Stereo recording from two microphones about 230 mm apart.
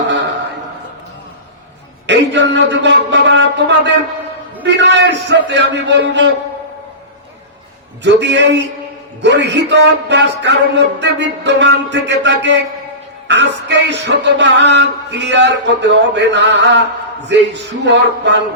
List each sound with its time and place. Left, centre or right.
2.0 s a man's voice: right
4.6 s music: right
8.0 s music: right